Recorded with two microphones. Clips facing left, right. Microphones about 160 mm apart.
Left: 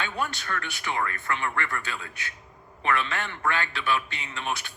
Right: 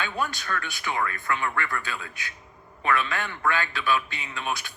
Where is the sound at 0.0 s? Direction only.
25° left (ahead or behind).